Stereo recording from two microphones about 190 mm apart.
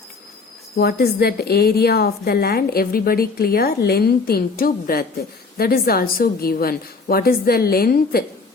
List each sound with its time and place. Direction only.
0.8 s a woman's voice: 55° left (ahead or behind)